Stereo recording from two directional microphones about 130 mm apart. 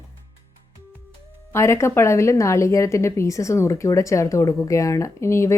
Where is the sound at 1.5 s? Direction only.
20° left (ahead or behind).